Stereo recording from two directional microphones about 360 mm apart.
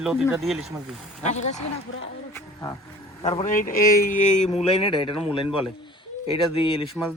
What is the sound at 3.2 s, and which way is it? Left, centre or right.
A man's voice, centre.